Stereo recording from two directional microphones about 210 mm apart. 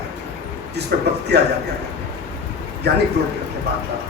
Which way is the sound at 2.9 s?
50° right (ahead or behind).